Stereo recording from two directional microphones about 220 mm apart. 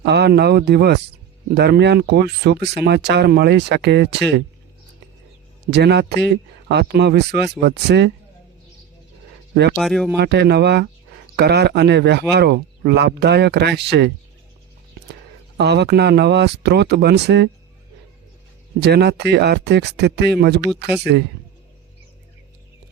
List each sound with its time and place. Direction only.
0.0 s speech: 50° right (ahead or behind)
5.7 s speech: 50° right (ahead or behind)
9.7 s speech: centre (ahead or behind)
10.2 s speech: 50° right (ahead or behind)
15.5 s speech: 50° right (ahead or behind)
18.8 s speech: 50° right (ahead or behind)